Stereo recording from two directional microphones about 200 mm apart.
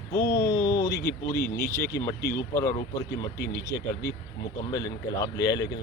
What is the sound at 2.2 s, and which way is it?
Speech, 50° left (ahead or behind).